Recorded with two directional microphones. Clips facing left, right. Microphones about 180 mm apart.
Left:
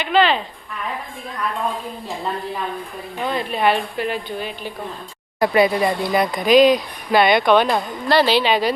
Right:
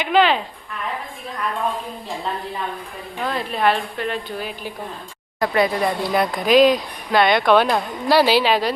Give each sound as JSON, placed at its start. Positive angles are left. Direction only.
{"t": 0.0, "sound": "speech", "side_deg": -10}
{"t": 3.2, "sound": "speech", "side_deg": 0}
{"t": 4.4, "sound": "speech", "side_deg": -5}